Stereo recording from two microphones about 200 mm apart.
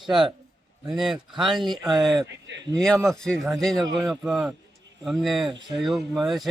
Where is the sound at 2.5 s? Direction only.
65° right (ahead or behind).